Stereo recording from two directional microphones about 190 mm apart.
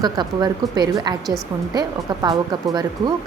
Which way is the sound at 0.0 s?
20° right (ahead or behind).